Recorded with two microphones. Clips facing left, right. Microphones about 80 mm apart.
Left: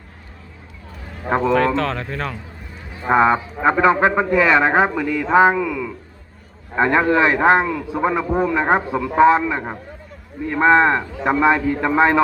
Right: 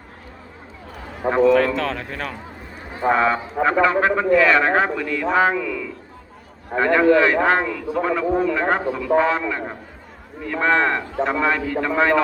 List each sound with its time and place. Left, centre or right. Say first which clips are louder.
1.5 s speech: left 1 dB; centre
3.1 s a man's voice: left 3 dB; left
5.3 s a sound: left 5 dB; centre
6.7 s a man's voice: right 1 dB; left